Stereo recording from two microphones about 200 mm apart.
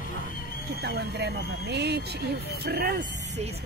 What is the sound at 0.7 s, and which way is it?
Speech, 55° right (ahead or behind).